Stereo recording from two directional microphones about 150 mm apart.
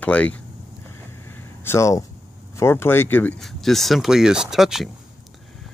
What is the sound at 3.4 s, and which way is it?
Speech, centre (ahead or behind).